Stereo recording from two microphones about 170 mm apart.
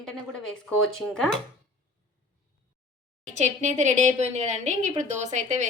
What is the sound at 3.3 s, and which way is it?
A woman's voice, 45° right (ahead or behind).